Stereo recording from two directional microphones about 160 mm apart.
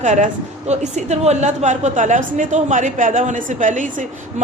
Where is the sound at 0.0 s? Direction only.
50° right (ahead or behind).